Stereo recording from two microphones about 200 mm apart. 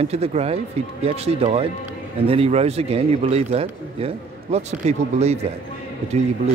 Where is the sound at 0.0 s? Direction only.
30° right (ahead or behind).